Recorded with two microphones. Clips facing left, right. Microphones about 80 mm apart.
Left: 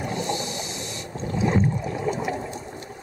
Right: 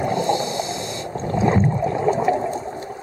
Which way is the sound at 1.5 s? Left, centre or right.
Right.